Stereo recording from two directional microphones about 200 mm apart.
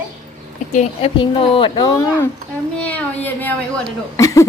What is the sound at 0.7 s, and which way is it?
Speech, 35° left (ahead or behind).